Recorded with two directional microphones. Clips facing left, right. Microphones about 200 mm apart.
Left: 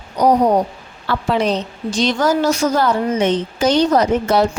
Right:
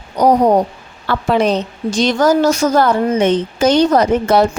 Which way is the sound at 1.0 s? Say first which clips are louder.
Right 3 dB; 55° right (ahead or behind).